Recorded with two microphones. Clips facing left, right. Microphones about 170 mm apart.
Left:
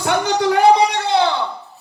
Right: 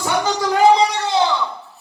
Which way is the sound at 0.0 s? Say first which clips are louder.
Left 2 dB; 60° left (ahead or behind).